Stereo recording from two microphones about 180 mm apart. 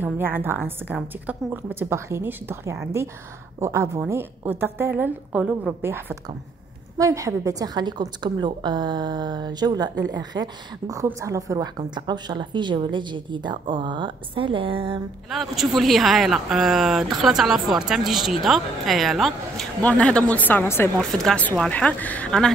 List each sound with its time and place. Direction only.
0.0 s a woman's voice: 10° right (ahead or behind); by 15.0 s 30° right (ahead or behind)
15.2 s speech: centre (ahead or behind)
21.0 s speech: centre (ahead or behind)